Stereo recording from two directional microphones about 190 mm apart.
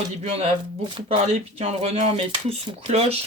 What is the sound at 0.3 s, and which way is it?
Speech, 35° right (ahead or behind).